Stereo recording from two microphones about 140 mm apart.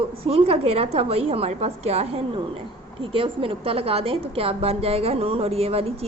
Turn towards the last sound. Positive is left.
turn(degrees=-45)  # may be behind; listen again after turning